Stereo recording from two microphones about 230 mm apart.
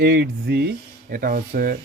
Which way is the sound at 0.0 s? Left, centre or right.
Right.